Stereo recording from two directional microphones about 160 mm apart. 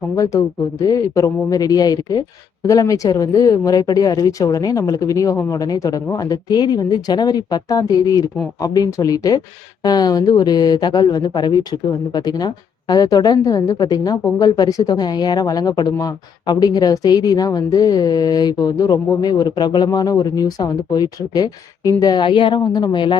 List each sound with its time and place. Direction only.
0.2 s speech: 20° left (ahead or behind)